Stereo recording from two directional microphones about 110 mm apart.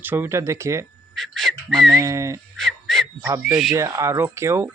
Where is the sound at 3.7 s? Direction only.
25° right (ahead or behind).